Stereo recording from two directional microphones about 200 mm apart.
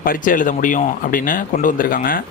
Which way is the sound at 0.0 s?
45° left (ahead or behind).